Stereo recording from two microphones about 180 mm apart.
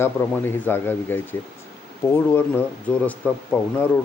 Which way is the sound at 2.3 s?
10° left (ahead or behind).